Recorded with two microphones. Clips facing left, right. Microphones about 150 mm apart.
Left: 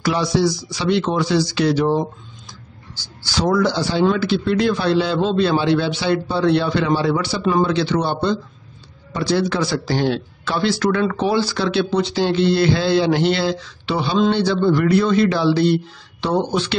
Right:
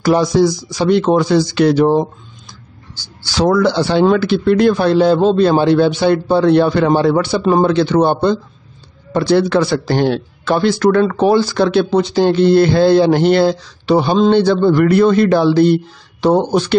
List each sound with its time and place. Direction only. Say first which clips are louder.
0.0 s a man's voice: right 6 dB; 45° right (ahead or behind)
3.3 s a man's voice: right 5 dB; 75° right (ahead or behind); by 14.3 s 40° right (ahead or behind)
14.3 s a man's voice: right 6 dB; 50° right (ahead or behind)